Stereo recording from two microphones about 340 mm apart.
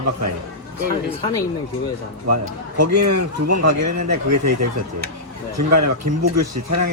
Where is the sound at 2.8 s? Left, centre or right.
Right.